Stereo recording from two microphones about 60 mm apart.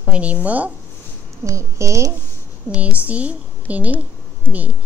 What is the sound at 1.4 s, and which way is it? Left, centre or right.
Speech, right.